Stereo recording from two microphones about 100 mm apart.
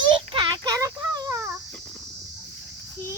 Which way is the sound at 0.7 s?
35° right (ahead or behind).